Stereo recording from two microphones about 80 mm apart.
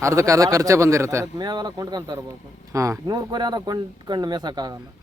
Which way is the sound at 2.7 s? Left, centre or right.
Right.